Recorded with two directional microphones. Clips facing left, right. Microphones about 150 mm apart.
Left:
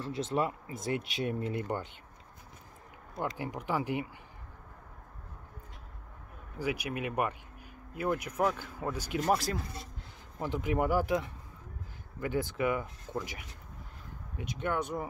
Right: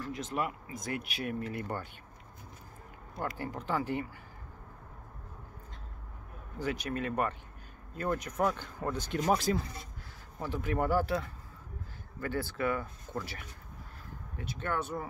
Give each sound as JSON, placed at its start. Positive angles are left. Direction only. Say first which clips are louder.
{"t": 0.0, "sound": "speech", "louder": "left 3 dB", "side_deg": 30}
{"t": 3.2, "sound": "speech", "louder": "left 1 dB", "side_deg": 15}
{"t": 6.6, "sound": "speech", "louder": "even", "side_deg": 10}
{"t": 10.4, "sound": "speech", "louder": "left 2 dB", "side_deg": 15}